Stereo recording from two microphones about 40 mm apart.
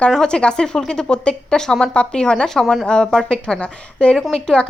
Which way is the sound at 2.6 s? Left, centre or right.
Centre.